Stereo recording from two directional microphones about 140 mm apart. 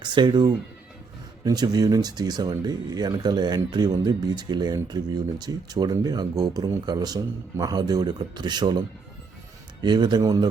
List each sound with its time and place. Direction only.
0.0 s speech: 35° right (ahead or behind)
9.8 s speech: 30° right (ahead or behind)